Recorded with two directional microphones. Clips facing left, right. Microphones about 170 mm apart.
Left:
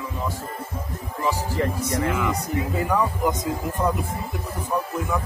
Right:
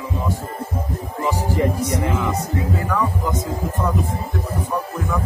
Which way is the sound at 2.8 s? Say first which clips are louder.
Even; 15° left (ahead or behind).